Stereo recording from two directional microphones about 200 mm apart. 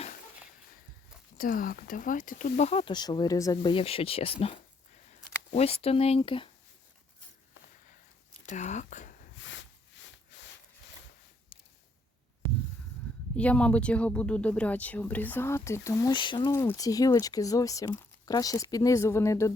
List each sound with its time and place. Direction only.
1.4 s speech: 45° left (ahead or behind); by 6.5 s 25° left (ahead or behind)
8.4 s speech: 35° left (ahead or behind)
9.4 s a sound: 65° left (ahead or behind)
13.3 s speech: 5° left (ahead or behind); by 16.5 s 25° left (ahead or behind)
16.5 s speech: 15° left (ahead or behind)